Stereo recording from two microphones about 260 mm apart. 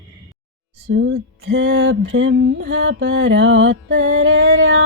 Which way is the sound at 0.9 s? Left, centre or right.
Right.